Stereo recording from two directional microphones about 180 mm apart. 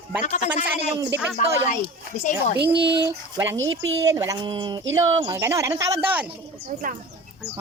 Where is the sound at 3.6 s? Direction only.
90° right.